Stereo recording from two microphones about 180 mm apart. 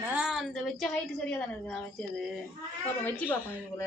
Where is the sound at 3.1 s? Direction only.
10° left (ahead or behind).